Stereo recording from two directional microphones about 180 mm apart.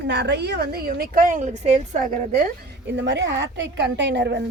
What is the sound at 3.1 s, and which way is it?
A woman's voice, 75° right (ahead or behind).